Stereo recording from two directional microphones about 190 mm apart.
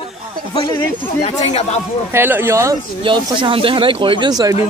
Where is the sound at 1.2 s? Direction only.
35° left (ahead or behind).